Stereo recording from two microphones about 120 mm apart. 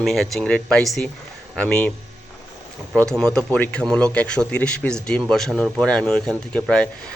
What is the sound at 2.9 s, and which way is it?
Speech, 5° left (ahead or behind).